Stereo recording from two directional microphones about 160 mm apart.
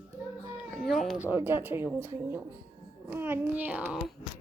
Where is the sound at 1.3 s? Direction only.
15° right (ahead or behind).